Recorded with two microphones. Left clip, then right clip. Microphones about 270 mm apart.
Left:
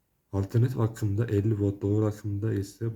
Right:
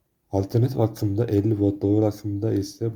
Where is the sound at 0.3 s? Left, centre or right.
Centre.